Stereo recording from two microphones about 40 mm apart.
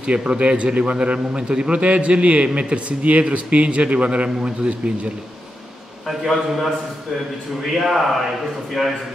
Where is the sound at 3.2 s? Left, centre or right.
Right.